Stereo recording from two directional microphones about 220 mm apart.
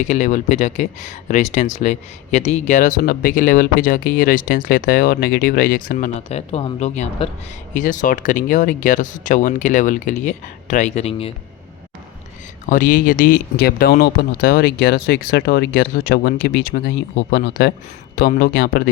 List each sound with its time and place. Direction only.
0.0 s speech: 35° left (ahead or behind)
12.6 s speech: 40° left (ahead or behind)